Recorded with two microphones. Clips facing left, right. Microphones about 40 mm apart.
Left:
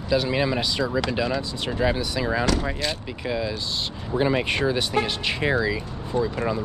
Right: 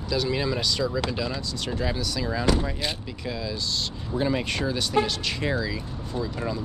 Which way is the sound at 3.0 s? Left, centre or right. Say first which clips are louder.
Left 5 dB; left.